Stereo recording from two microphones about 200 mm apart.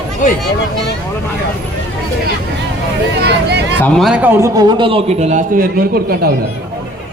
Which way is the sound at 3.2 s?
55° right (ahead or behind).